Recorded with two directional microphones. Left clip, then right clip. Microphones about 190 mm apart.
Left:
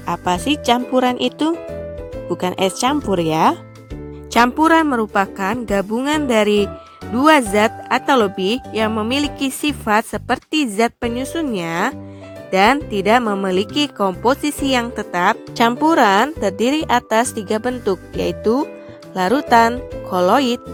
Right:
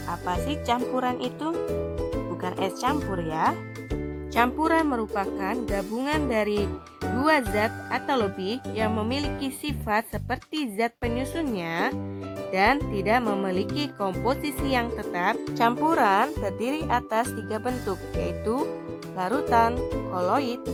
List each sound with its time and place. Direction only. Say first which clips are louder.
0.1 s a woman's voice: left 10 dB; 35° left (ahead or behind)
19.1 s music: left 9 dB; 40° left (ahead or behind)
20.1 s a woman's voice: left 12 dB; 40° left (ahead or behind)